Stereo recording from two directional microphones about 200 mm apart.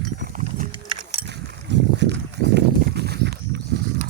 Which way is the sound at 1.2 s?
60° right (ahead or behind).